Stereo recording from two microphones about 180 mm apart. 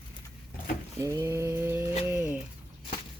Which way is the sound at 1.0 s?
15° right (ahead or behind).